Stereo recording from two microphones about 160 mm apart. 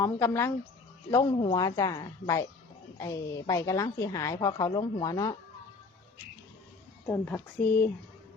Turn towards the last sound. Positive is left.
turn(degrees=10)  # may be behind; listen again after turning